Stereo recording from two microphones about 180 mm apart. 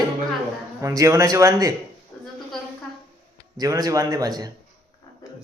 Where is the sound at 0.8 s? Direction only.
15° right (ahead or behind).